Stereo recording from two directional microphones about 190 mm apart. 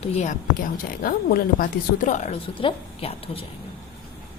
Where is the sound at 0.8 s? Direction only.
50° left (ahead or behind).